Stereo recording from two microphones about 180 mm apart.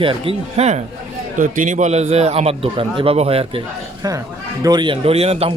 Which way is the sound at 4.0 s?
20° right (ahead or behind).